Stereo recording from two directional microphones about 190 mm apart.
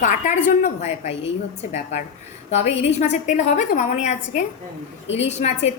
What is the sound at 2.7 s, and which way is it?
A woman's voice, 35° left (ahead or behind).